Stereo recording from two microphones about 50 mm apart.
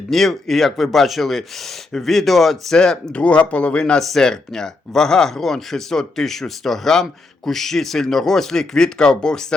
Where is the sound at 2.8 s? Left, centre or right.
Centre.